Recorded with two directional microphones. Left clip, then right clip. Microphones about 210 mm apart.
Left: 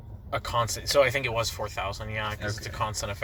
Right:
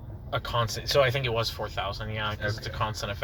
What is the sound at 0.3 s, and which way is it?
Speech, 40° left (ahead or behind).